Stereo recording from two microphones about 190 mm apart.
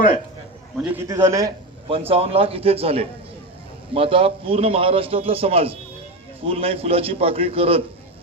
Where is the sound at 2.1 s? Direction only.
30° right (ahead or behind).